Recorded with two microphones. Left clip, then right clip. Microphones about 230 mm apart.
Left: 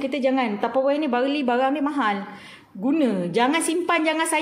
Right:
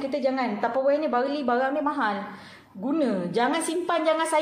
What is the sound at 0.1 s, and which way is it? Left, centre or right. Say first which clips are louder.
Speech: left 3 dB; left.